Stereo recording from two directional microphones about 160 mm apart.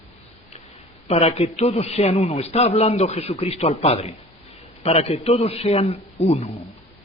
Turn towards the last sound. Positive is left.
turn(degrees=40)  # may be behind; listen again after turning